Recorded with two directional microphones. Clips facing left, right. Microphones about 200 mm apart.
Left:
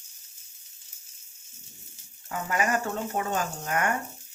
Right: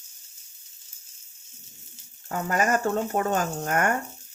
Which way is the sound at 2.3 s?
45° right (ahead or behind).